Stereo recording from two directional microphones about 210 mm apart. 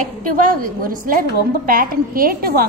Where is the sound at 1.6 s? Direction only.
40° right (ahead or behind).